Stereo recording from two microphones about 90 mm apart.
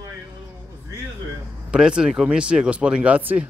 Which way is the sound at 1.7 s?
10° right (ahead or behind).